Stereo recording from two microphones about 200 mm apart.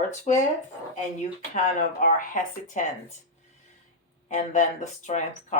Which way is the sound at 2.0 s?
40° left (ahead or behind).